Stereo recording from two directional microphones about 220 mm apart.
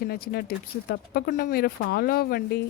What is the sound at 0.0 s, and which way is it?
Speech, 45° left (ahead or behind).